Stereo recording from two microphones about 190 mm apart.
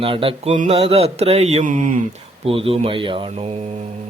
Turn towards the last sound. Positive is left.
turn(degrees=-30)  # may be behind; listen again after turning